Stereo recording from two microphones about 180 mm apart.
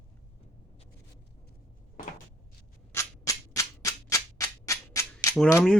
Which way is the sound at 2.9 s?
20° left (ahead or behind).